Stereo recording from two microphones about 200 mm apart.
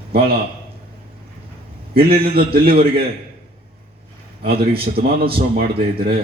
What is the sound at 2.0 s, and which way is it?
Speech, 50° right (ahead or behind).